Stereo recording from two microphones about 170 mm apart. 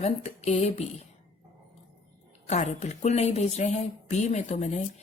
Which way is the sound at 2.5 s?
40° left (ahead or behind).